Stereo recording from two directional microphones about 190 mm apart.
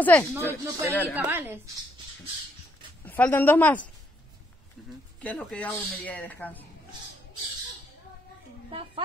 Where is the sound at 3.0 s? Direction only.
10° left (ahead or behind).